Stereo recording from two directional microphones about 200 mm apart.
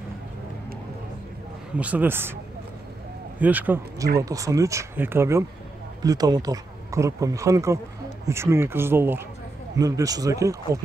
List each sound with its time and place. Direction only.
1.8 s speech: 10° right (ahead or behind)
3.3 s speech: 10° right (ahead or behind)